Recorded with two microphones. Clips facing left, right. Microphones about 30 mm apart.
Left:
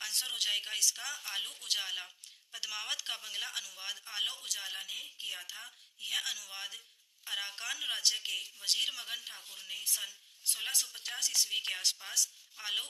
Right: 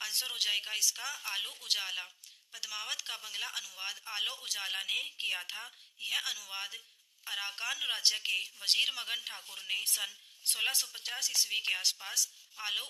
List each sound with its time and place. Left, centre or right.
0.0 s a woman's voice: centre
4.4 s speech: right
4.7 s a woman's voice: right
5.1 s a woman's voice: right
5.5 s a woman's voice: centre
8.0 s a woman's voice: centre
8.5 s speech: right
9.6 s a woman's voice: right
10.8 s a woman's voice: centre